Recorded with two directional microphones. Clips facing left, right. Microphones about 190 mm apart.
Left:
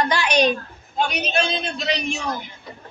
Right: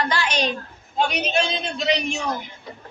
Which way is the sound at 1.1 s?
20° right (ahead or behind).